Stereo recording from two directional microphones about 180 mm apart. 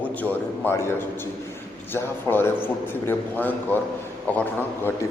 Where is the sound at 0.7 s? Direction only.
15° left (ahead or behind).